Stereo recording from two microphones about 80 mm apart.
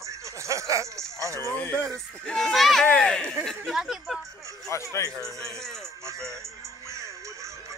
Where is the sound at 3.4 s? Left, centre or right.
Centre.